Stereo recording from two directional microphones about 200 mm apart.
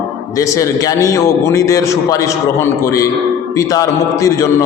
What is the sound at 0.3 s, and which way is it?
A man's voice, 15° left (ahead or behind).